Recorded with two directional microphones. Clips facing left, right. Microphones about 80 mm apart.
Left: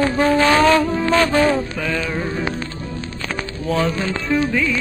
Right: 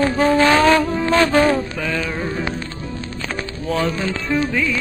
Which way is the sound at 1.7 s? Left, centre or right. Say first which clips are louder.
Even; centre.